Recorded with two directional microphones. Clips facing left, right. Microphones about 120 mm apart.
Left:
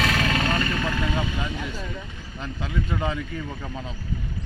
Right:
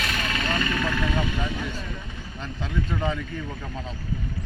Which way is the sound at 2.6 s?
5° left (ahead or behind).